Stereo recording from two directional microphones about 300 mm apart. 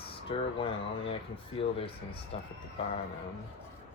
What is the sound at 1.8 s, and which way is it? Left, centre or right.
Speech, centre.